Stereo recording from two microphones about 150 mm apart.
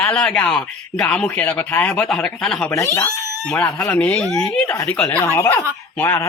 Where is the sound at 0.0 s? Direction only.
5° left (ahead or behind).